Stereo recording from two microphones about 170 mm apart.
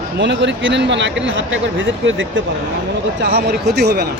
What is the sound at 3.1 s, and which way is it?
Speech, 75° right (ahead or behind).